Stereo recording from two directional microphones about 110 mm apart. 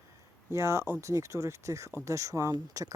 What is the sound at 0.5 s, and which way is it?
Speech, 25° right (ahead or behind).